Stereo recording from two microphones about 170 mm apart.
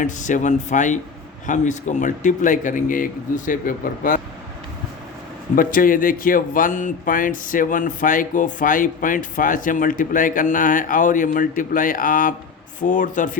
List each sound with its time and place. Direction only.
0.0 s speech: 50° left (ahead or behind)
5.5 s speech: 55° left (ahead or behind)